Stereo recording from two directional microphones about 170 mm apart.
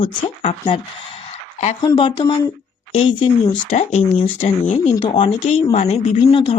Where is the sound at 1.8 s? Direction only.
25° left (ahead or behind).